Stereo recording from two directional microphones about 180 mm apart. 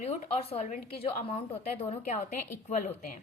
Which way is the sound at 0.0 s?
40° left (ahead or behind).